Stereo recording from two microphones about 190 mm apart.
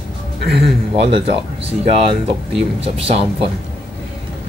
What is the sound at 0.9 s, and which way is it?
Speech, 30° right (ahead or behind).